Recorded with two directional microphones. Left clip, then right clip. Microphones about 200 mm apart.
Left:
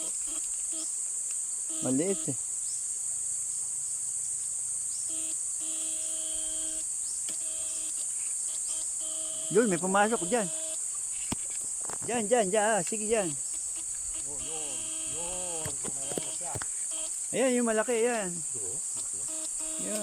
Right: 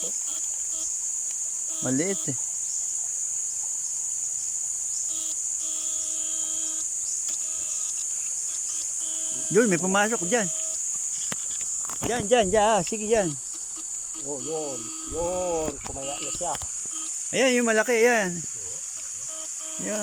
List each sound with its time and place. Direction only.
1.8 s cricket: 5° left (ahead or behind)
9.5 s cricket: centre (ahead or behind)
12.1 s cricket: 5° right (ahead or behind)
15.4 s speech: 55° right (ahead or behind)
17.3 s speech: 10° left (ahead or behind)